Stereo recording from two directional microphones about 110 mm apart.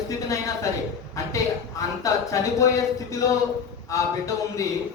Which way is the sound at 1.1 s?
30° left (ahead or behind).